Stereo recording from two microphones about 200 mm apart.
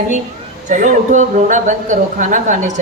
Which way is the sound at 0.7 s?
40° right (ahead or behind).